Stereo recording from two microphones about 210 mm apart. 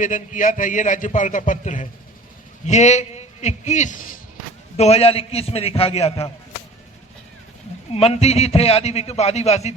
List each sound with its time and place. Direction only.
0.0 s a man's voice: 40° left (ahead or behind)
7.9 s a man's voice: 30° left (ahead or behind)